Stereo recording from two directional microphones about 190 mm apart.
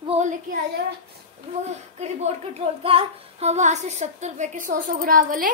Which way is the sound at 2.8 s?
30° right (ahead or behind).